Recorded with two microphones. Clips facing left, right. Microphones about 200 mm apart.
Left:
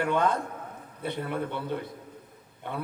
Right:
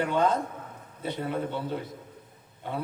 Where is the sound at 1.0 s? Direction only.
60° left (ahead or behind).